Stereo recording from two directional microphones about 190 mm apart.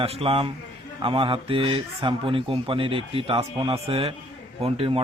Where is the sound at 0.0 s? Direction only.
30° right (ahead or behind).